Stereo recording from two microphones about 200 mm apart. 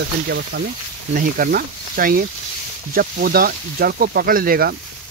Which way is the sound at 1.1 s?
45° right (ahead or behind).